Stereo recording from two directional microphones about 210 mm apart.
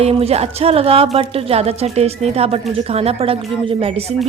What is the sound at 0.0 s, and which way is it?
A woman's voice, 30° right (ahead or behind).